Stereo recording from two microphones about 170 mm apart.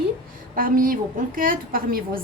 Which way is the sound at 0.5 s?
55° right (ahead or behind).